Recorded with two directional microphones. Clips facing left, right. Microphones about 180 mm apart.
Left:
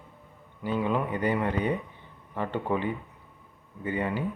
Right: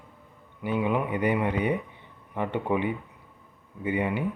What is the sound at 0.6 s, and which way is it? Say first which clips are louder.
A man's voice: right 1 dB; 15° right (ahead or behind).